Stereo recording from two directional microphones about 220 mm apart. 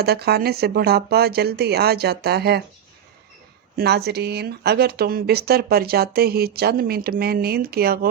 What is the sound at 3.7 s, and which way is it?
Speech, 45° right (ahead or behind).